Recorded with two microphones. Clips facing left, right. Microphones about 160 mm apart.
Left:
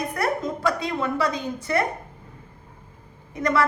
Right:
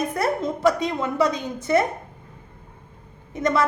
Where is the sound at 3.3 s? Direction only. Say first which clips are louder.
Right 1 dB; 20° right (ahead or behind).